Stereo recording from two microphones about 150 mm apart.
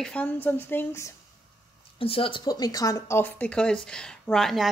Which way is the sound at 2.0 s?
35° left (ahead or behind).